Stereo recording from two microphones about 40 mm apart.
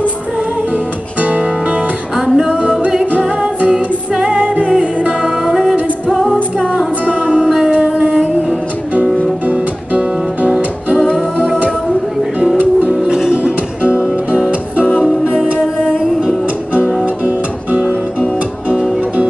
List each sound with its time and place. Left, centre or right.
2.1 s music: centre
7.1 s music: right
7.9 s music: centre
9.5 s music: right
13.0 s music: centre
15.0 s music: centre
17.0 s music: right